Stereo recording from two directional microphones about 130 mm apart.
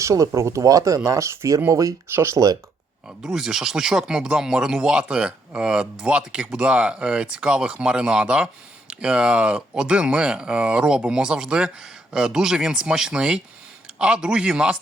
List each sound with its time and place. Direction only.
0.0 s speech: 25° right (ahead or behind)
3.2 s speech: 5° right (ahead or behind)